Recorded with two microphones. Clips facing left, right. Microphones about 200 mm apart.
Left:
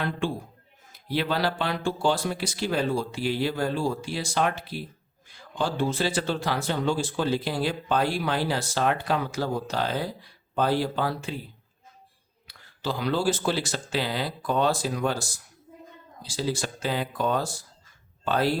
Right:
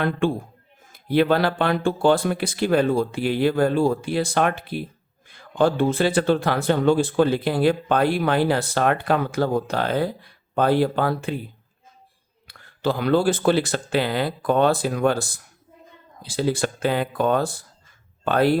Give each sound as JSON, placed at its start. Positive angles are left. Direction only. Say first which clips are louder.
{"t": 0.0, "sound": "speech", "louder": "right 7 dB", "side_deg": -55}
{"t": 12.5, "sound": "speech", "louder": "right 7 dB", "side_deg": -55}